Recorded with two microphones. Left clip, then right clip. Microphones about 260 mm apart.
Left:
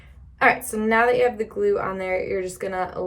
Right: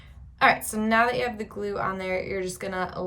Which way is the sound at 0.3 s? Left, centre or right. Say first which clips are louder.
Left 2 dB; centre.